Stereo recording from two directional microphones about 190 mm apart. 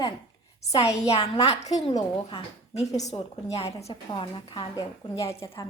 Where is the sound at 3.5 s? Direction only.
35° left (ahead or behind).